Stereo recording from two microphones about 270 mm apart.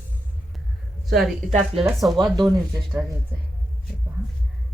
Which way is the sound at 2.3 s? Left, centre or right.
Centre.